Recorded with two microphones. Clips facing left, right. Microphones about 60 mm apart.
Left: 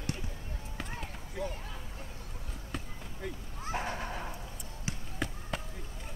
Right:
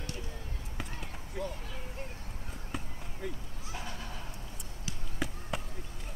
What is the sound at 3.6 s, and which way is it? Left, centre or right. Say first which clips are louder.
Neigh: left 7 dB; left.